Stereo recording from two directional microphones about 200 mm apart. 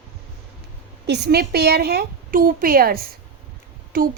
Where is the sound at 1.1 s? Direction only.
55° right (ahead or behind).